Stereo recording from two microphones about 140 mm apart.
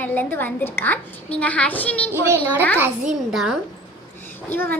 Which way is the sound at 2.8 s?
5° right (ahead or behind).